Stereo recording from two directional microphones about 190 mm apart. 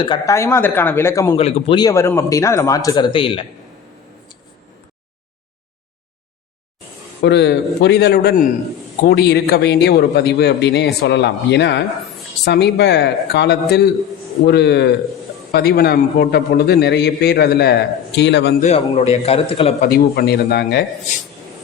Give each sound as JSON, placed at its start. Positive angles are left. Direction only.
{"t": 0.0, "sound": "speech", "side_deg": 20}
{"t": 1.4, "sound": "speech", "side_deg": 30}
{"t": 7.2, "sound": "a man's voice", "side_deg": 60}
{"t": 18.6, "sound": "a man's voice", "side_deg": 30}
{"t": 19.8, "sound": "a man's voice", "side_deg": 55}